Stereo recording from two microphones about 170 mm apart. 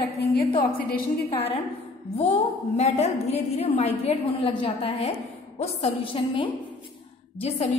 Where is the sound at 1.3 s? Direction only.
35° left (ahead or behind).